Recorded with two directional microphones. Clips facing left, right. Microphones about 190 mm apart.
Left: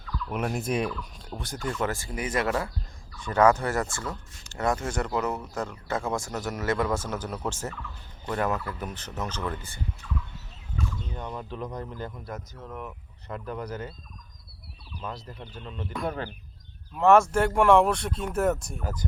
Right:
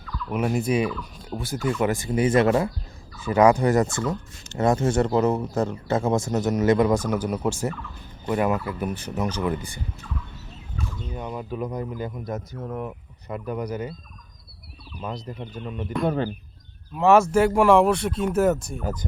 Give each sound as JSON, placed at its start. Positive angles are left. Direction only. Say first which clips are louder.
{"t": 0.3, "sound": "speech", "louder": "right 6 dB", "side_deg": 0}
{"t": 3.2, "sound": "speech", "louder": "right 4 dB", "side_deg": -10}
{"t": 11.1, "sound": "speech", "louder": "right 5 dB", "side_deg": -10}
{"t": 12.6, "sound": "speech", "louder": "right 7 dB", "side_deg": -30}
{"t": 13.2, "sound": "speech", "louder": "right 5 dB", "side_deg": -10}
{"t": 15.0, "sound": "speech", "louder": "right 5 dB", "side_deg": -15}
{"t": 16.0, "sound": "speech", "louder": "right 8 dB", "side_deg": -25}
{"t": 16.9, "sound": "speech", "louder": "right 2 dB", "side_deg": -5}
{"t": 18.8, "sound": "speech", "louder": "right 5 dB", "side_deg": -20}